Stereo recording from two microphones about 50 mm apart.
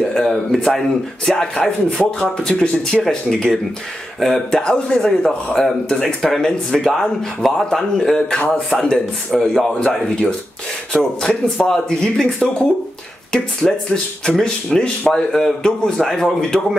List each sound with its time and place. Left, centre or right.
0.0 s a sound: centre
0.7 s speech: centre
5.2 s speech: centre
5.9 s speech: centre
10.9 s speech: centre